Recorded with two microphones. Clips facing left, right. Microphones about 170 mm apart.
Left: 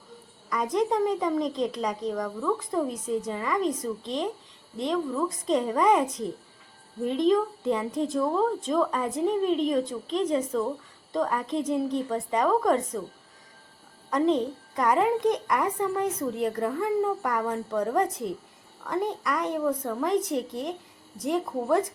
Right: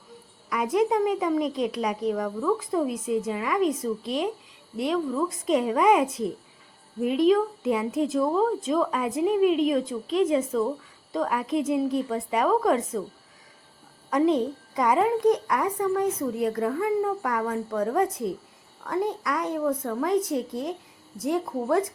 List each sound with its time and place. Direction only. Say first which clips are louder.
0.5 s a woman's voice: right 2 dB; 10° right (ahead or behind)
14.1 s a woman's voice: right 2 dB; 10° right (ahead or behind)